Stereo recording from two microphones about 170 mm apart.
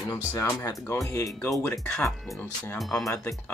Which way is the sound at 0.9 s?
15° left (ahead or behind).